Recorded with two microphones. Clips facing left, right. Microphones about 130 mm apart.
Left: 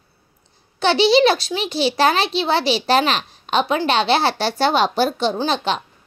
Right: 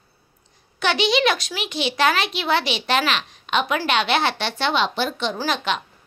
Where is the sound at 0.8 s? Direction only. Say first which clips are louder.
Left 6 dB; 30° left (ahead or behind).